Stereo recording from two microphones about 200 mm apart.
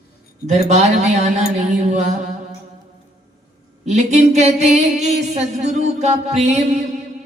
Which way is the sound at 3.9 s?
35° right (ahead or behind).